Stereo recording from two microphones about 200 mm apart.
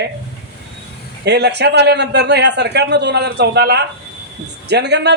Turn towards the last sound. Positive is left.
turn(degrees=-60)  # may be behind; listen again after turning